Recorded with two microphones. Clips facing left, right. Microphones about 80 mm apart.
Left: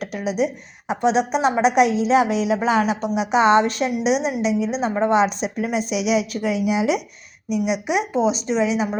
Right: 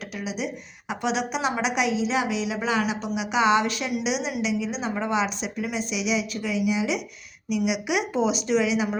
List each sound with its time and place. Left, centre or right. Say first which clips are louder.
0.3 s a woman's voice: left 10 dB; left
7.5 s speech: left 4 dB; left